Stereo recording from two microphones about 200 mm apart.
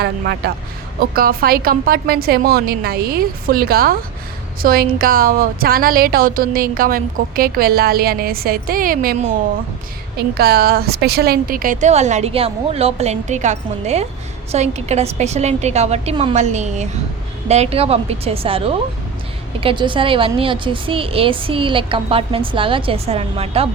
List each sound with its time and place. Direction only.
0.0 s a woman's voice: 55° right (ahead or behind)
10.2 s a woman's voice: 50° right (ahead or behind); by 23.6 s 30° right (ahead or behind)